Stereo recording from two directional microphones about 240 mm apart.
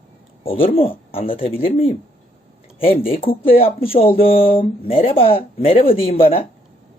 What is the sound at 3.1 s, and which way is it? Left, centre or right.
Speech, left.